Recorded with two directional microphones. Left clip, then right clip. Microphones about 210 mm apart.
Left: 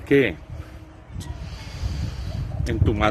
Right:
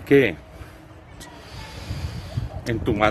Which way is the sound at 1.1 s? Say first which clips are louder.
Right 1 dB; 10° right (ahead or behind).